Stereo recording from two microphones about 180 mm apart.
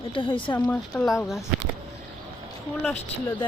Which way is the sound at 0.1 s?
30° left (ahead or behind).